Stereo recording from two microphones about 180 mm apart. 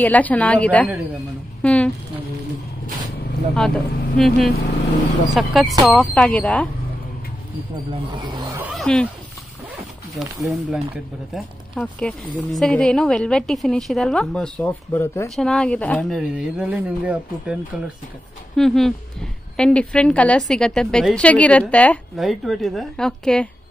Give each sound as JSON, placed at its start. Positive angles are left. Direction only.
{"t": 0.0, "sound": "a woman's voice", "side_deg": 10}
{"t": 1.6, "sound": "a sound", "side_deg": 5}
{"t": 3.5, "sound": "a woman's voice", "side_deg": 0}
{"t": 8.1, "sound": "speech", "side_deg": -25}
{"t": 8.7, "sound": "speech", "side_deg": 5}
{"t": 10.1, "sound": "a woman's voice", "side_deg": 0}
{"t": 15.2, "sound": "a woman's voice", "side_deg": 5}
{"t": 18.6, "sound": "a woman's voice", "side_deg": 0}